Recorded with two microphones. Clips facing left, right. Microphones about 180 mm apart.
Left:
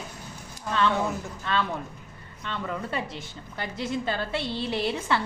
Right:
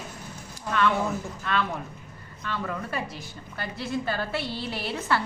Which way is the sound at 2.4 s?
25° left (ahead or behind).